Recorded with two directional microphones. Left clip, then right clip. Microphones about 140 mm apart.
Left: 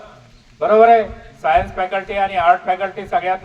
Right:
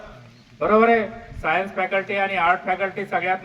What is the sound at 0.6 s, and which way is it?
A man's voice, 35° left (ahead or behind).